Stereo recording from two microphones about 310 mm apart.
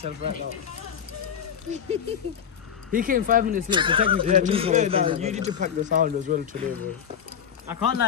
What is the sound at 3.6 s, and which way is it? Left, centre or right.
Speech, centre.